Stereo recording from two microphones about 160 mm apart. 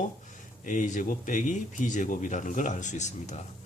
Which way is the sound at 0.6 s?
50° left (ahead or behind).